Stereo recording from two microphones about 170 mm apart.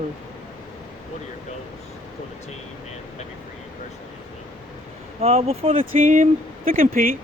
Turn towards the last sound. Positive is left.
turn(degrees=-55)  # may be behind; listen again after turning